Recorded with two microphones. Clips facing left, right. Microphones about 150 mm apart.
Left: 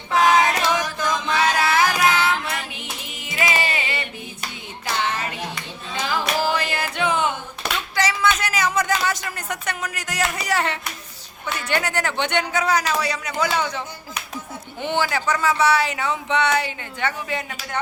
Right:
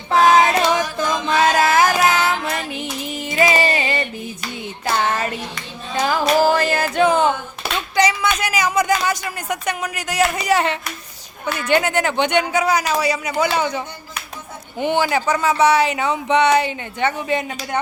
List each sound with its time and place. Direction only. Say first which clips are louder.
0.1 s music: right 4 dB; 35° right (ahead or behind)
7.9 s a sound: right 3 dB; 15° right (ahead or behind)
10.3 s speech: right 5 dB; 20° right (ahead or behind)